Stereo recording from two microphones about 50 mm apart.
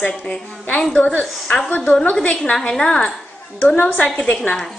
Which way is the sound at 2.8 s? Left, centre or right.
Centre.